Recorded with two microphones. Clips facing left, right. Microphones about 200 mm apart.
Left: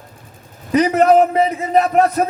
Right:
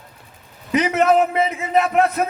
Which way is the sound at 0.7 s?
35° left (ahead or behind).